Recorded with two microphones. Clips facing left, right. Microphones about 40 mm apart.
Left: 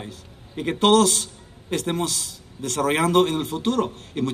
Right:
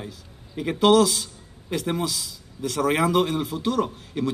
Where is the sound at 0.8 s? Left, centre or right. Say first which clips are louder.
Even; left.